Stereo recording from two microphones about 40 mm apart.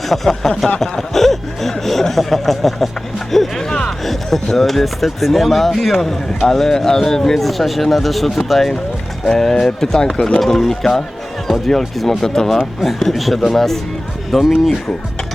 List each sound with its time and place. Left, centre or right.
0.1 s a man's voice: centre
0.8 s a sound: centre
1.8 s a man's voice: centre
9.2 s a man's voice: centre
10.4 s a man's voice: centre
13.1 s a man's voice: centre